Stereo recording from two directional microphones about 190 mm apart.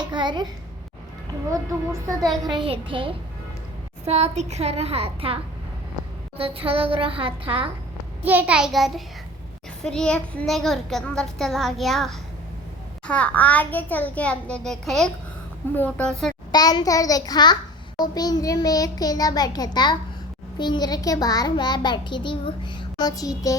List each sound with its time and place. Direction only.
0.0 s a sound: 25° right (ahead or behind)
1.5 s speech: 15° right (ahead or behind)
2.6 s a child's voice: 30° right (ahead or behind)
8.2 s a child's voice: 10° right (ahead or behind)
16.5 s a child's voice: 20° left (ahead or behind)